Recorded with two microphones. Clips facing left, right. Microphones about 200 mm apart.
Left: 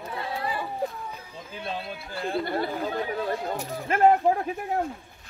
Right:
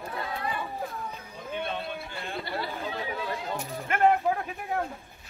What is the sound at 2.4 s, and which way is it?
Chatter, 50° left (ahead or behind).